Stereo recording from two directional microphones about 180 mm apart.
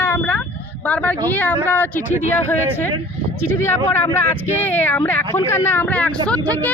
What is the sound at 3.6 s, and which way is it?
Speech, 15° left (ahead or behind).